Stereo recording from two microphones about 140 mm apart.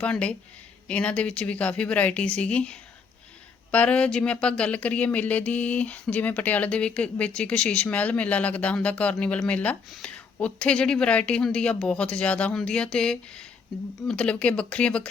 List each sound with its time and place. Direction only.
0.0 s speech: 10° left (ahead or behind)